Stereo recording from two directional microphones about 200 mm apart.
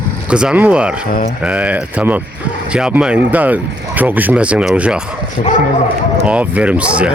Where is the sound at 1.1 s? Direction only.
45° left (ahead or behind).